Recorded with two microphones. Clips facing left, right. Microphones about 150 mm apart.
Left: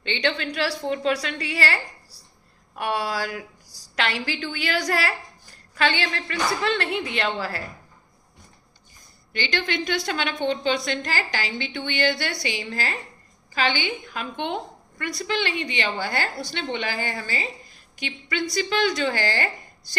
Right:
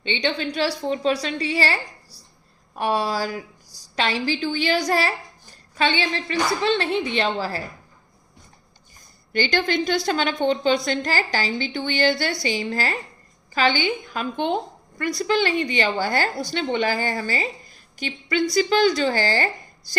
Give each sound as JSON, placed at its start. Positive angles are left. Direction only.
{"t": 0.0, "sound": "a woman's voice", "side_deg": -20}
{"t": 9.3, "sound": "a woman's voice", "side_deg": -40}